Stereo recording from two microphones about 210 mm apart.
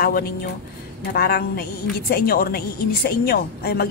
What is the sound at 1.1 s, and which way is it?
A woman's voice, 45° left (ahead or behind).